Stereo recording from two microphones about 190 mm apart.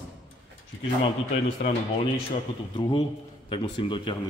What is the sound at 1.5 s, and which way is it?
Speech, 35° left (ahead or behind).